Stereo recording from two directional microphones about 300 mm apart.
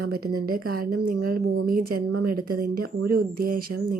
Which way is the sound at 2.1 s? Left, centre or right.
Right.